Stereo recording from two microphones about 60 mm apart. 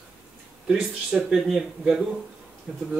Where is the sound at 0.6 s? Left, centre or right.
Centre.